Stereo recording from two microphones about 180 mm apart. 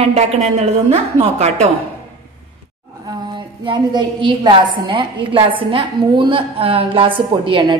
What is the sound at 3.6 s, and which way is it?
A woman's voice, 25° right (ahead or behind).